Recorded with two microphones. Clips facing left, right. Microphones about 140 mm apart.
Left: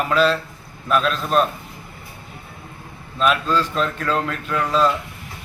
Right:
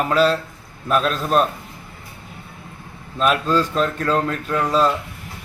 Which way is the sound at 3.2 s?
40° right (ahead or behind).